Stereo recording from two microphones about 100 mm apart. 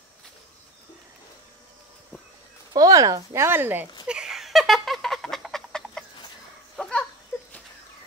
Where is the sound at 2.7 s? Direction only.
40° right (ahead or behind).